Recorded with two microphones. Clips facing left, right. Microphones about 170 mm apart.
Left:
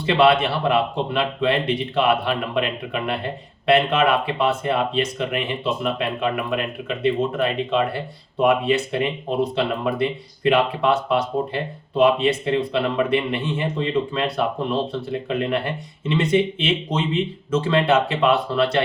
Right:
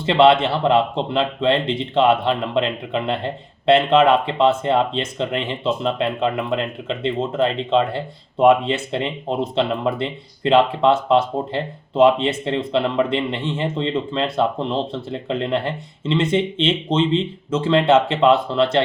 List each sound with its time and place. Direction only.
0.0 s speech: 25° right (ahead or behind)